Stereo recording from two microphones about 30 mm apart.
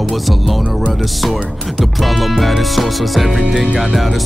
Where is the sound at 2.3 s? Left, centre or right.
Centre.